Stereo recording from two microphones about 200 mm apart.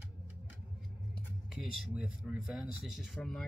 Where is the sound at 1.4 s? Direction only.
Centre (ahead or behind).